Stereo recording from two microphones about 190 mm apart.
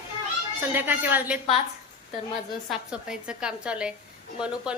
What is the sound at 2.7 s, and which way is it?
Speech, 5° right (ahead or behind).